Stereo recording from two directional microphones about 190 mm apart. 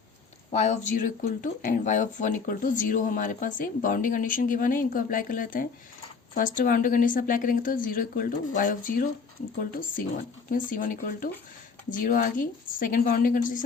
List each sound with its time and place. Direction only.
0.5 s speech: 40° left (ahead or behind)